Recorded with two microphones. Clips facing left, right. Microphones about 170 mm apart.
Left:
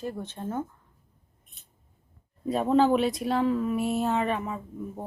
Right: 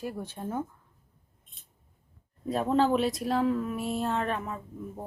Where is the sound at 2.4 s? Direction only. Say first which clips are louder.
Left 3 dB; centre (ahead or behind).